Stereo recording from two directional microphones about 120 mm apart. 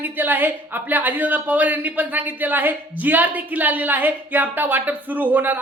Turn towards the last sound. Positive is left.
turn(degrees=-15)  # may be behind; listen again after turning